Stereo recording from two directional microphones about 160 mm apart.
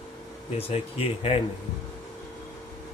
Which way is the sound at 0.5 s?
40° left (ahead or behind).